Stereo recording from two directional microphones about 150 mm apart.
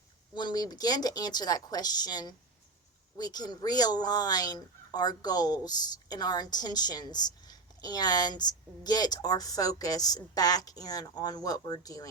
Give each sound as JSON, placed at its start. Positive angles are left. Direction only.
{"t": 0.3, "sound": "speech", "side_deg": 25}